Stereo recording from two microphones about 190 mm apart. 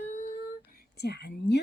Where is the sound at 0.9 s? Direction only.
60° left (ahead or behind).